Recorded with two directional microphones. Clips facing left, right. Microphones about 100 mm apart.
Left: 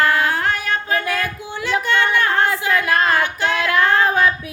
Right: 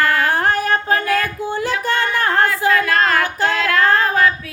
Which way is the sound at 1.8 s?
35° right (ahead or behind).